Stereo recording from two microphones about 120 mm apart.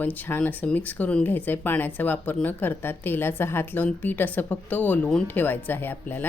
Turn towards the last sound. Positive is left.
turn(degrees=15)  # may be behind; listen again after turning